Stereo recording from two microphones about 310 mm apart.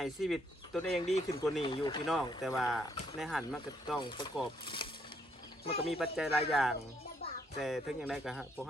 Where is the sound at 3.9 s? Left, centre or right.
Centre.